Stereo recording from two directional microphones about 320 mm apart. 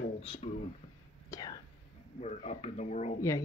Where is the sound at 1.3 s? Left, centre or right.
Centre.